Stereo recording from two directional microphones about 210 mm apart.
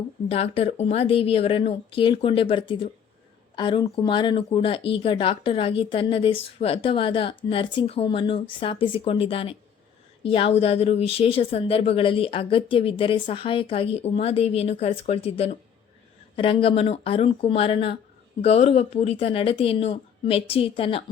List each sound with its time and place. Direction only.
0.3 s speech: 30° left (ahead or behind)